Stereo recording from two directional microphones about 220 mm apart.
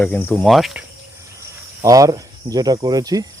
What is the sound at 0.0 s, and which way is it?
Speech, 5° left (ahead or behind).